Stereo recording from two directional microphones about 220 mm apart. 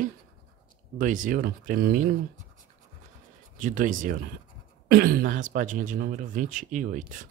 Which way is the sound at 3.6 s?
35° right (ahead or behind).